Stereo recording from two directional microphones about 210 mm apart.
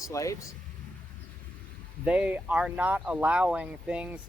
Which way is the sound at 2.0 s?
5° right (ahead or behind).